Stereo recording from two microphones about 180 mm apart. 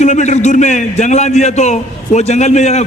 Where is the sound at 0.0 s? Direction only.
40° left (ahead or behind).